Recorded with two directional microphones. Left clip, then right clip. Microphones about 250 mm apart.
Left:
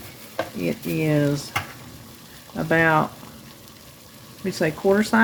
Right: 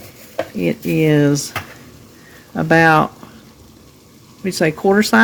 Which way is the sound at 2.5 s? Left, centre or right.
Right.